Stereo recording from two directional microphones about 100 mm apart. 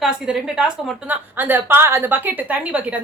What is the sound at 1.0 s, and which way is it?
A woman's voice, 15° right (ahead or behind).